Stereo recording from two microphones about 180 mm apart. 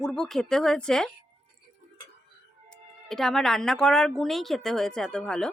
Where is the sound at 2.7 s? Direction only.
Centre (ahead or behind).